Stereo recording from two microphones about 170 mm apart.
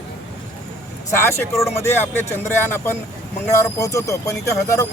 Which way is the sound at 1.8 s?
15° left (ahead or behind).